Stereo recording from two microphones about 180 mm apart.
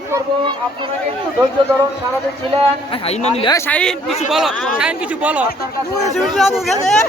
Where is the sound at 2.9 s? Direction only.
35° left (ahead or behind).